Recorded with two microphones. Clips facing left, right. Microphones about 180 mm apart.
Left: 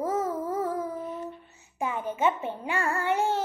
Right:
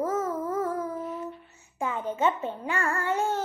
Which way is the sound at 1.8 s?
10° left (ahead or behind).